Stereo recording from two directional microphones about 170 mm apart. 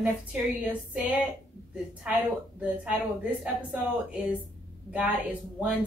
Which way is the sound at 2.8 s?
10° right (ahead or behind).